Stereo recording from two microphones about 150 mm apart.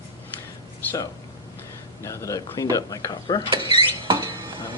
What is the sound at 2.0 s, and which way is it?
Speech, 20° left (ahead or behind).